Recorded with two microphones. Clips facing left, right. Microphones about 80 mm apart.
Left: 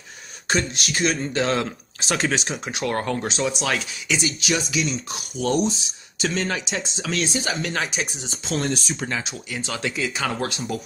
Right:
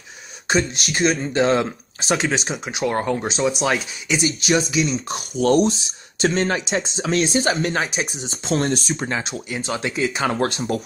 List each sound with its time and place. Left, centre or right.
0.5 s speech: right
2.1 s speech: centre
5.1 s speech: right
6.2 s speech: right
7.3 s speech: right
7.7 s speech: right
8.5 s speech: right
9.7 s speech: right